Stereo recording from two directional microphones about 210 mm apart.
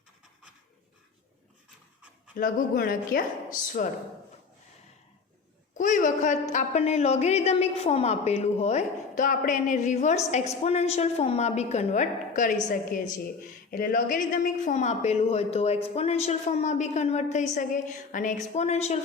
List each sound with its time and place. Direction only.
2.3 s speech: 40° left (ahead or behind)
5.7 s a woman's voice: 35° left (ahead or behind)
13.7 s a woman's voice: 40° left (ahead or behind)